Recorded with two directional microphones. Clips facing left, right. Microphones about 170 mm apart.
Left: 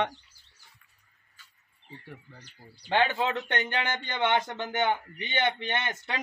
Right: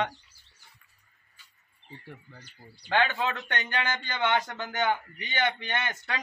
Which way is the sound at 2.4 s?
25° left (ahead or behind).